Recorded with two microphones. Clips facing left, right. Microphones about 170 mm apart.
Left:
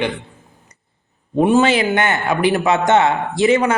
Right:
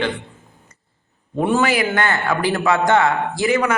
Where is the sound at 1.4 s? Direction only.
20° left (ahead or behind).